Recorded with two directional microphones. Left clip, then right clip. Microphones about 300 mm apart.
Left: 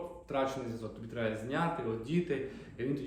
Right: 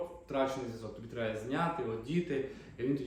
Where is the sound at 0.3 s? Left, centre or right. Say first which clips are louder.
Even; centre.